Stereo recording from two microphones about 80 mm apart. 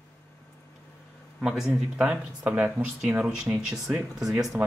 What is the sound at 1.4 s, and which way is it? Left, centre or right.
Speech, centre.